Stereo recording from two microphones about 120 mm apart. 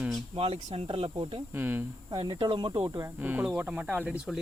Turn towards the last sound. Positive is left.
turn(degrees=-10)  # may be behind; listen again after turning